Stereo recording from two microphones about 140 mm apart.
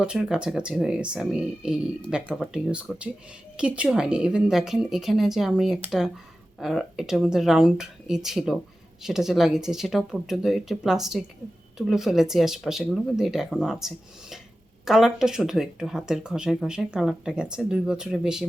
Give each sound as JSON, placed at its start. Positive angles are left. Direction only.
{"t": 0.0, "sound": "speech", "side_deg": -5}